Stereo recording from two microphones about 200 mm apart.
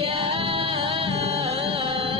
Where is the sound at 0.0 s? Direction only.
30° right (ahead or behind).